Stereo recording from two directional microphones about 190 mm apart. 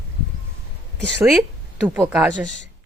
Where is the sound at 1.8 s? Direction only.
10° right (ahead or behind).